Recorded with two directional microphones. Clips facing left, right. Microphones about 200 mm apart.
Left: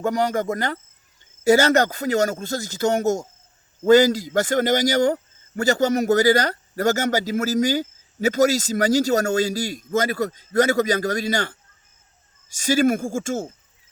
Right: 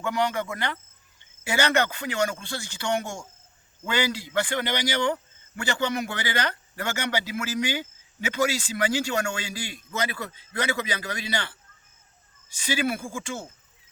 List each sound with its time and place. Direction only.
0.0 s a man's voice: 40° left (ahead or behind)